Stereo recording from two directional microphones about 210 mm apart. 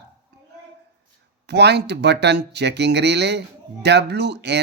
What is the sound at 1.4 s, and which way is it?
Speech, 55° right (ahead or behind).